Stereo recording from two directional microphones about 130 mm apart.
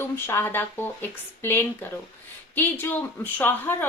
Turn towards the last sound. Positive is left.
turn(degrees=15)  # may be behind; listen again after turning